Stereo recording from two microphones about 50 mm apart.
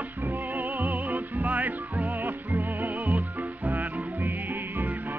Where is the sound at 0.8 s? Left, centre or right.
Right.